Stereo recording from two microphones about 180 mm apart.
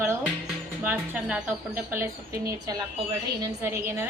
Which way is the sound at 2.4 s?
20° right (ahead or behind).